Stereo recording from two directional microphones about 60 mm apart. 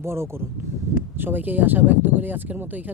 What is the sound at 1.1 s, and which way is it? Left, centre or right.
A man's voice, right.